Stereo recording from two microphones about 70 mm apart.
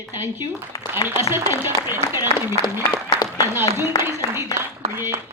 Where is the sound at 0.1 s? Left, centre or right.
Right.